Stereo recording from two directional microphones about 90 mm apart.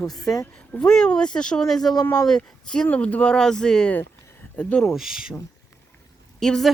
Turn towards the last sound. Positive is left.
turn(degrees=5)  # may be behind; listen again after turning